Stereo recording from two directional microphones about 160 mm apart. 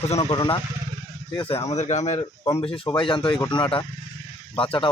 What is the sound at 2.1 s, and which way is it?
Speech, 20° left (ahead or behind).